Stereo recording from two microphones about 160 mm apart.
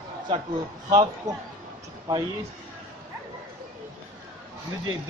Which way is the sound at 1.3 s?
50° right (ahead or behind).